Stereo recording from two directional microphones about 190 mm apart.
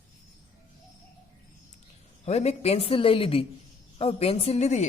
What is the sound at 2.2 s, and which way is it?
A man's voice, 35° left (ahead or behind).